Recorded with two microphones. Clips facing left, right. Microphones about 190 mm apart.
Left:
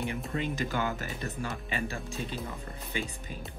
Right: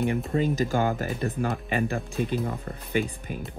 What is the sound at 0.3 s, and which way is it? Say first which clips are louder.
Speech: right 8 dB; 40° right (ahead or behind).